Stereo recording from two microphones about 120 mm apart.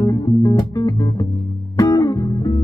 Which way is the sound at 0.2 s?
35° left (ahead or behind).